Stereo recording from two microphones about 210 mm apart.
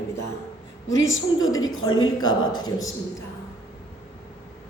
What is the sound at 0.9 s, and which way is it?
Speech, 65° left (ahead or behind).